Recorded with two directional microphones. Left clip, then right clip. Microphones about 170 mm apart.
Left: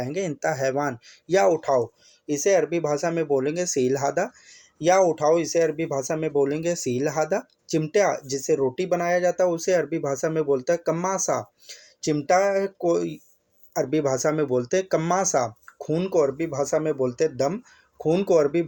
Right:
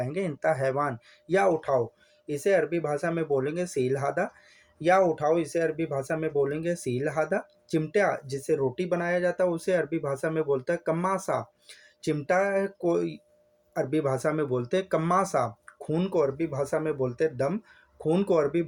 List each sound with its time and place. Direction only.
0.0 s speech: 30° left (ahead or behind)